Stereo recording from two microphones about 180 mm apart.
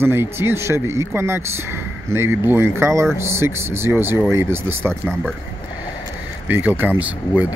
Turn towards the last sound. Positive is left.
turn(degrees=-10)  # may be behind; listen again after turning